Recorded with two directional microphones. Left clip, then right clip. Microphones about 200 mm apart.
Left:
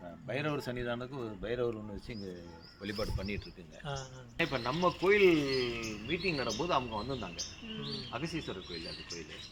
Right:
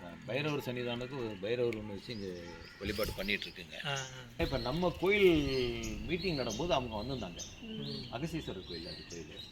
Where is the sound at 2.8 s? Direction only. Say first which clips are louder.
Right 2 dB; 60° left (ahead or behind).